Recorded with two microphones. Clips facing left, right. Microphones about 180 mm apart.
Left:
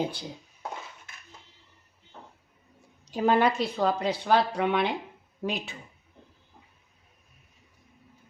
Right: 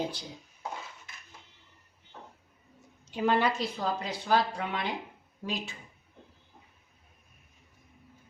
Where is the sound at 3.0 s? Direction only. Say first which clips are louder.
Left 4 dB; 40° left (ahead or behind); by 5.8 s 65° left (ahead or behind).